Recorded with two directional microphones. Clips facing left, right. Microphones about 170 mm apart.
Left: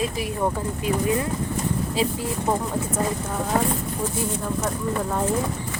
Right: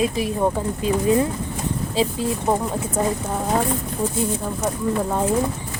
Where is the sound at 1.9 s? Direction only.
25° right (ahead or behind).